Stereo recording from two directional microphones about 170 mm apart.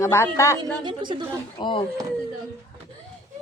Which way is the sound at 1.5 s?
30° left (ahead or behind).